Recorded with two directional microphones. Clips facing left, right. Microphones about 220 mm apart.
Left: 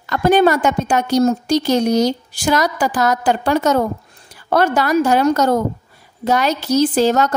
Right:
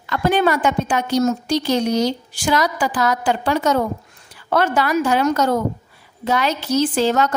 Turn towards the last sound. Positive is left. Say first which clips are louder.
# left 3 dB
turn(degrees=40)  # may be behind; listen again after turning